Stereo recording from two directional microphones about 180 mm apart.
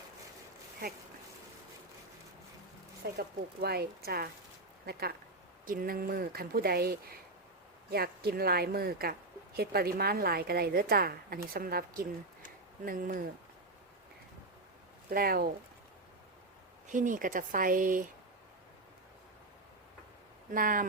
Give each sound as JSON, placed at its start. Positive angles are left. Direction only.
{"t": 3.2, "sound": "a woman's voice", "side_deg": -60}
{"t": 15.1, "sound": "a woman's voice", "side_deg": -55}
{"t": 16.9, "sound": "speech", "side_deg": -45}
{"t": 20.5, "sound": "speech", "side_deg": -50}